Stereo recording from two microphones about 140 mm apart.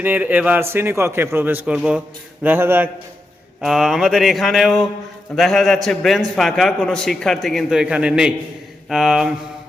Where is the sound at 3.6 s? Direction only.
Centre (ahead or behind).